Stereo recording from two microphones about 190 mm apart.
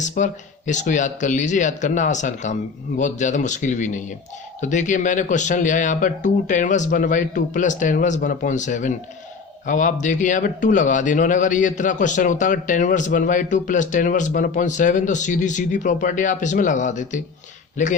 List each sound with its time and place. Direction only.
0.0 s a man's voice: 40° left (ahead or behind)